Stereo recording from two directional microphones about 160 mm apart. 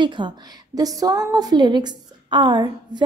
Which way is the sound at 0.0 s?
30° right (ahead or behind).